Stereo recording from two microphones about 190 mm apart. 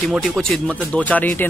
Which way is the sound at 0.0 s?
Centre (ahead or behind).